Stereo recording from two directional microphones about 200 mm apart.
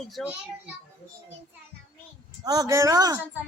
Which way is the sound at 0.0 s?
Centre (ahead or behind).